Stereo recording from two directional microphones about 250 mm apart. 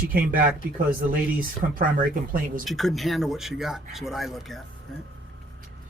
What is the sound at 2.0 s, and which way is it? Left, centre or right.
Speech, right.